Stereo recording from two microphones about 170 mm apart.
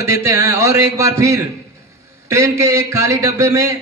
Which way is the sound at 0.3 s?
20° right (ahead or behind).